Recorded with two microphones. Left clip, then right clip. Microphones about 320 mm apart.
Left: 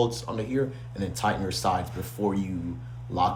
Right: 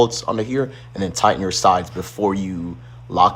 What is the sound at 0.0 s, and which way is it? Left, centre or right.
Speech, right.